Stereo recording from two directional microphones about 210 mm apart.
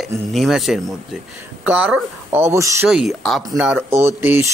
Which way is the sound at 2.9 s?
Centre (ahead or behind).